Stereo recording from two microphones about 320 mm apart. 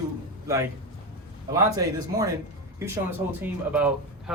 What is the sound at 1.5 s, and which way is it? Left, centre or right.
A man's voice, centre.